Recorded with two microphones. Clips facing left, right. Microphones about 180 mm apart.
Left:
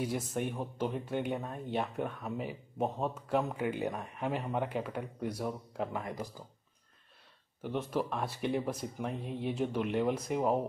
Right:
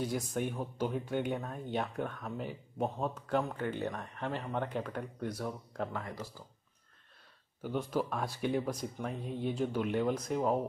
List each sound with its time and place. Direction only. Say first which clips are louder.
0.0 s speech: even; 5° left (ahead or behind)
7.6 s speech: even; centre (ahead or behind)